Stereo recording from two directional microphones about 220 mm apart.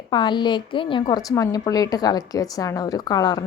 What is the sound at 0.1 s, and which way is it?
A woman's voice, 20° left (ahead or behind).